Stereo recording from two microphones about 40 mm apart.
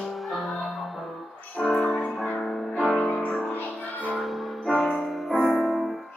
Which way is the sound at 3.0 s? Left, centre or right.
Left.